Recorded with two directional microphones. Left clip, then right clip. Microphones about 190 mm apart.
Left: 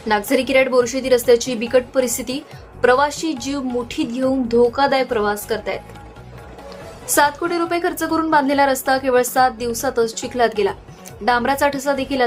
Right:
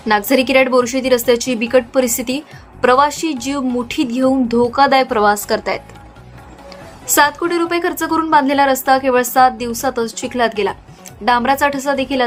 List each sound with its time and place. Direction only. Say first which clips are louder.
0.1 s a woman's voice: right 4 dB; 20° right (ahead or behind)
5.1 s a woman's voice: right 6 dB; 40° right (ahead or behind)
7.1 s a woman's voice: right 3 dB; 15° right (ahead or behind)